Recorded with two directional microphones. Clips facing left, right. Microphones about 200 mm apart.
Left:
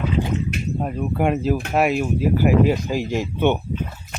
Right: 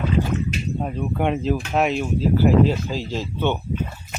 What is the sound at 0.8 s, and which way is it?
Speech, 5° left (ahead or behind).